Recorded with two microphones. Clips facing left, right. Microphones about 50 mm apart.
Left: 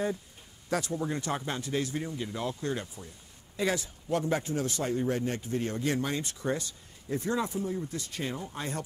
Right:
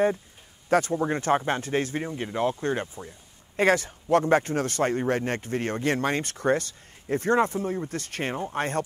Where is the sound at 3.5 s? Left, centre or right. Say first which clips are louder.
Right 8 dB; right.